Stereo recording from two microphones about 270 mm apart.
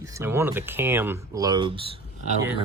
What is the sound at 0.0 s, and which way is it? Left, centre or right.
Speech, centre.